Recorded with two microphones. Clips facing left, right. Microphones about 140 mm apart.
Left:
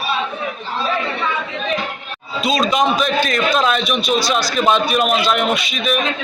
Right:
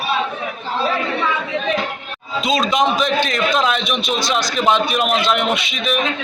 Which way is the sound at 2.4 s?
20° right (ahead or behind).